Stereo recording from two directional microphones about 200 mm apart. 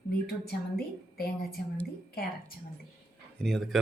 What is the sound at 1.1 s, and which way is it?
A woman's voice, 50° left (ahead or behind).